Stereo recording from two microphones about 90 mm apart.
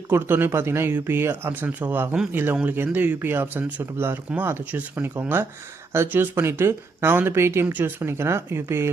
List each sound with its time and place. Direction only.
0.1 s speech: 25° right (ahead or behind)